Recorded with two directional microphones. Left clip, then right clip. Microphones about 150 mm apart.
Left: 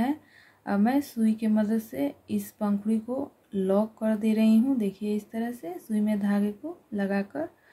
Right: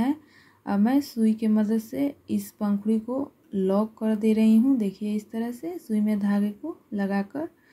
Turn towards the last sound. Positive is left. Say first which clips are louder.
# even
turn(degrees=-15)  # may be behind; listen again after turning